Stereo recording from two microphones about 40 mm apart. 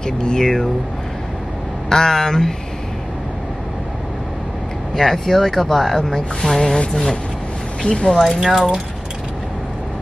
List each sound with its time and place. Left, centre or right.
0.0 s a sound: centre
1.9 s speech: centre
4.9 s speech: centre
7.8 s speech: centre
8.2 s speech: centre